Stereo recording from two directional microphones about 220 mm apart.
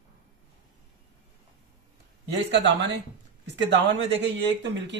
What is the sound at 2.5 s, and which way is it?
Speech, 55° right (ahead or behind).